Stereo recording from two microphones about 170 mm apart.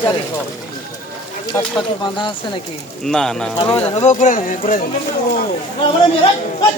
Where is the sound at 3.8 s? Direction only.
35° left (ahead or behind); by 4.8 s 50° left (ahead or behind).